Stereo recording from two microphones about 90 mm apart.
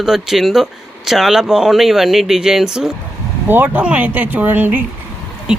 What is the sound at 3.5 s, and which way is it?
Speech, 20° right (ahead or behind).